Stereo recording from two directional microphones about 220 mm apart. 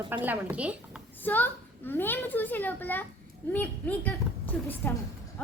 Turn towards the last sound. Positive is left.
turn(degrees=10)  # may be behind; listen again after turning